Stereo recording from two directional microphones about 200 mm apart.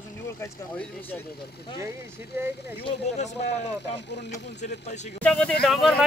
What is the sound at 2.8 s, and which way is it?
Speech, 35° left (ahead or behind).